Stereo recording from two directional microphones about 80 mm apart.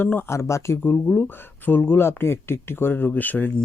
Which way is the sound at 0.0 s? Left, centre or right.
Left.